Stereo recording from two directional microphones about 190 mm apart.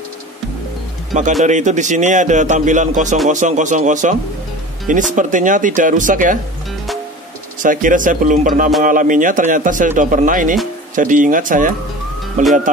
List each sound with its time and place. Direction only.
1.4 s a man's voice: 40° right (ahead or behind)
7.6 s speech: 45° right (ahead or behind)